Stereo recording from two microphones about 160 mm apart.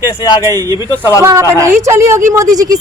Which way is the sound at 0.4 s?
25° right (ahead or behind).